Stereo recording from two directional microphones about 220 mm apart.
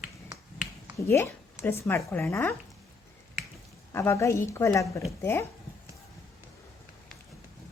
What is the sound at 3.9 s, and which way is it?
A woman's voice, 10° left (ahead or behind).